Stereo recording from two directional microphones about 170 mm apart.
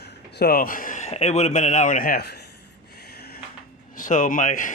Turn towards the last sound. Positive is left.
turn(degrees=50)  # may be behind; listen again after turning